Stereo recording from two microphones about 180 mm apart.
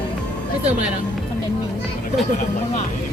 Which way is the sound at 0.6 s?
35° right (ahead or behind).